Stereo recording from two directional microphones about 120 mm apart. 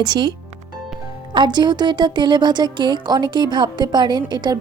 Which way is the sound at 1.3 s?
40° right (ahead or behind).